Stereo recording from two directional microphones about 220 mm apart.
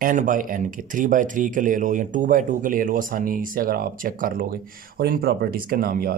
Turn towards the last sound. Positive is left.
turn(degrees=-40)  # may be behind; listen again after turning